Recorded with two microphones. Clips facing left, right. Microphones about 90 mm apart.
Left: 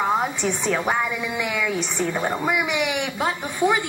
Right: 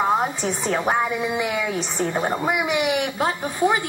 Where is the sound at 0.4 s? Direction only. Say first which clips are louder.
Even; 40° right (ahead or behind).